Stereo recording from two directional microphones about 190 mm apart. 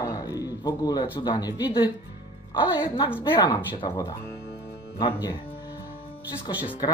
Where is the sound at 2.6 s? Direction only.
25° left (ahead or behind).